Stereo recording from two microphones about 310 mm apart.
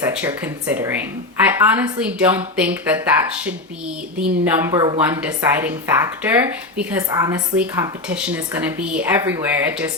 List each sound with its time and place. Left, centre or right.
0.0 s speech: centre
4.2 s a woman's voice: centre